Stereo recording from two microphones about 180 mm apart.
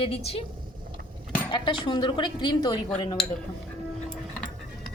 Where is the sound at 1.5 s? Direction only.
25° left (ahead or behind).